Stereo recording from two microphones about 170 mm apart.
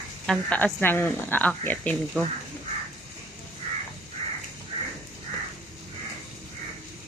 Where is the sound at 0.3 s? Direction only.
10° left (ahead or behind).